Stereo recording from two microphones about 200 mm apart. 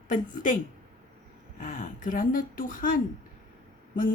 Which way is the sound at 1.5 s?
40° left (ahead or behind).